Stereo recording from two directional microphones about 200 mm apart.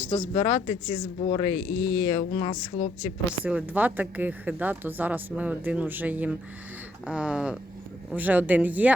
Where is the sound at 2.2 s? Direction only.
30° left (ahead or behind).